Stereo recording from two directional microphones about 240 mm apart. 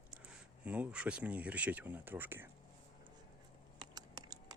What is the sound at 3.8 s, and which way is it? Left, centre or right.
Typing, centre.